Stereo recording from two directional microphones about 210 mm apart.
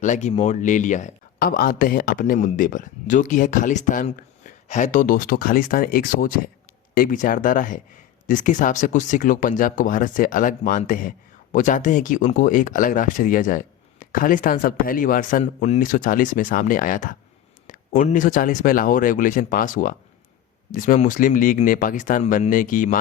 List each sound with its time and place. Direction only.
0.0 s speech: 35° left (ahead or behind)